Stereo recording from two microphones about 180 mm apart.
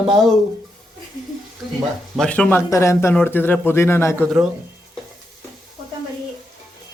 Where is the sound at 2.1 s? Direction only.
5° left (ahead or behind).